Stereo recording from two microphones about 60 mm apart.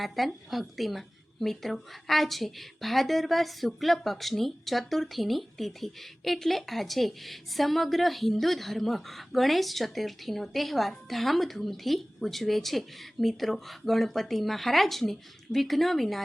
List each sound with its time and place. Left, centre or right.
0.0 s a woman's voice: centre